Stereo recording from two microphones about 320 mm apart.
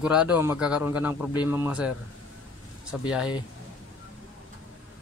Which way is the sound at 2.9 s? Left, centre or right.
Centre.